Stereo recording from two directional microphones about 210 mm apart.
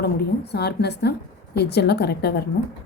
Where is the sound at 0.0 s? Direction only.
50° left (ahead or behind).